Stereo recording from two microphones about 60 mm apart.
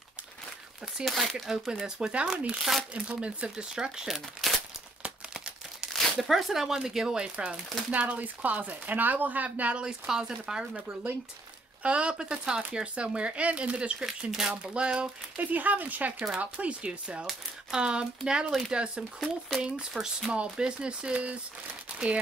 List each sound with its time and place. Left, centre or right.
1.0 s speech: centre
5.0 s crumpling: centre
6.1 s speech: centre
7.9 s speech: right
9.8 s speech: centre
11.8 s speech: centre
21.9 s crumpling: centre